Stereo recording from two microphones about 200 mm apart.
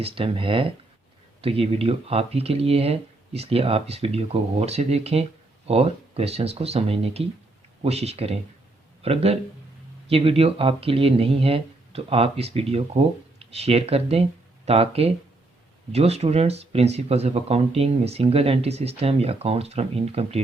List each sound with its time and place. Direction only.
0.0 s speech: 30° right (ahead or behind)